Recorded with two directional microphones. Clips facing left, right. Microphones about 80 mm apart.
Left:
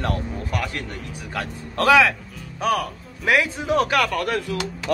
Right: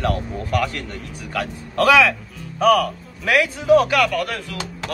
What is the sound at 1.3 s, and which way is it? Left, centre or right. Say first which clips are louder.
Speech: right 4 dB; left.